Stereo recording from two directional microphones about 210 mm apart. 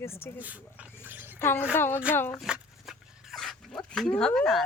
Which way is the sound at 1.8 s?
10° left (ahead or behind).